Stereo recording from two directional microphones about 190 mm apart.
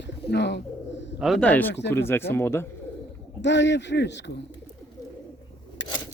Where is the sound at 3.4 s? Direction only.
65° left (ahead or behind).